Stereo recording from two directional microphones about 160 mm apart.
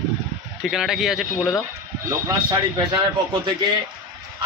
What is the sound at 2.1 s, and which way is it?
Speech, 25° right (ahead or behind).